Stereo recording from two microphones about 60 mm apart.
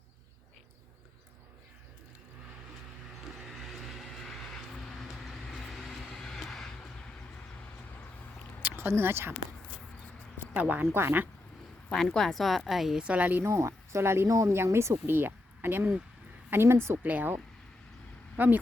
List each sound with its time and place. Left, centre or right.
3.5 s vehicle: centre
8.6 s a sound: right
8.9 s a woman's voice: right
10.6 s a woman's voice: right
11.9 s speech: centre
13.0 s speech: right
13.4 s speech: right
14.3 s a woman's voice: right
17.1 s a woman's voice: right